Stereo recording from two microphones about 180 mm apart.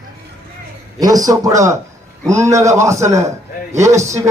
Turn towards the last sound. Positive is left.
turn(degrees=-15)  # may be behind; listen again after turning